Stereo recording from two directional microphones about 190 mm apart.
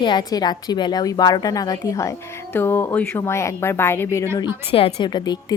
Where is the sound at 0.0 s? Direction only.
25° left (ahead or behind).